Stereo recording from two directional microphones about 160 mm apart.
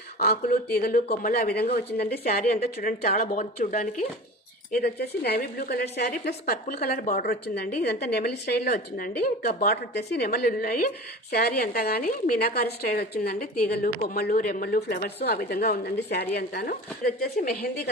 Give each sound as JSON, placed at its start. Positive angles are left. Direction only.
{"t": 0.2, "sound": "a woman's voice", "side_deg": 70}
{"t": 4.7, "sound": "a woman's voice", "side_deg": 80}
{"t": 10.1, "sound": "a woman's voice", "side_deg": 80}
{"t": 14.0, "sound": "speech", "side_deg": 70}
{"t": 14.8, "sound": "a woman's voice", "side_deg": 75}